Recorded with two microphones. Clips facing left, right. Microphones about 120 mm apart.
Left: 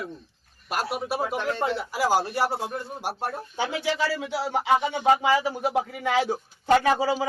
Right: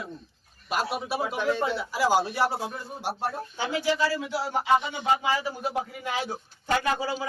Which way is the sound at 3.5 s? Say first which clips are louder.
Even; 80° left.